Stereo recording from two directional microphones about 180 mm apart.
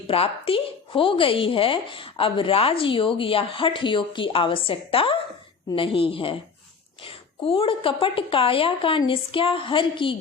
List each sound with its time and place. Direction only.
0.1 s a woman's voice: 30° left (ahead or behind)